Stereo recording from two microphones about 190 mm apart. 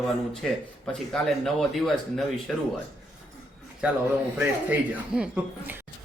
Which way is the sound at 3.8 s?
5° right (ahead or behind).